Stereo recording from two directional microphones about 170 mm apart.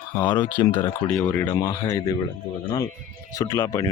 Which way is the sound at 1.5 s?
20° left (ahead or behind).